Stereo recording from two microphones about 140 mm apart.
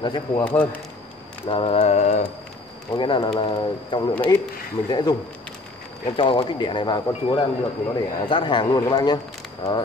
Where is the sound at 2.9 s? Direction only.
30° left (ahead or behind).